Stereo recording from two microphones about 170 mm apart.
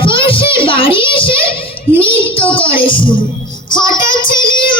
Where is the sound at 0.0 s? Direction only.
30° left (ahead or behind).